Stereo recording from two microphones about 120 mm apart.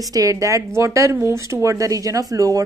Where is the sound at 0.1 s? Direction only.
30° right (ahead or behind).